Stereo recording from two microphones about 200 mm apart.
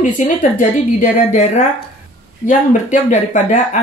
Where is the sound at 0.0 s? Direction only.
40° left (ahead or behind).